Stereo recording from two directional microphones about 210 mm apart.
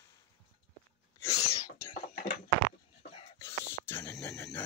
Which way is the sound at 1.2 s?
15° left (ahead or behind).